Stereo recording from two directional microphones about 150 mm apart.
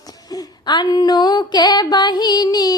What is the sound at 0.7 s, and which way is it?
Music, 30° left (ahead or behind).